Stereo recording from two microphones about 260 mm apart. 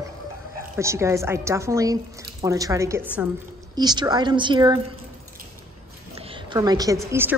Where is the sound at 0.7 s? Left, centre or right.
Centre.